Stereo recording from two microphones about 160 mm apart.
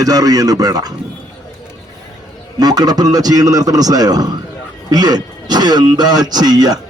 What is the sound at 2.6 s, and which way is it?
A man's voice, 25° right (ahead or behind).